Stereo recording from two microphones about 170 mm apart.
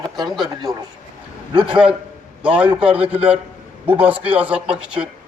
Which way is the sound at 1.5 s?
30° right (ahead or behind).